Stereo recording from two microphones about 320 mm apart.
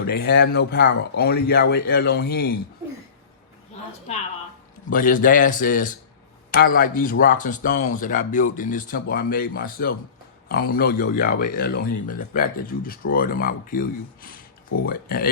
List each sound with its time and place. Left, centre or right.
0.1 s speech: left
4.9 s speech: left